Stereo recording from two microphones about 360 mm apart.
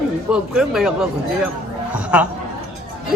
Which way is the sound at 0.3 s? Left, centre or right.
Centre.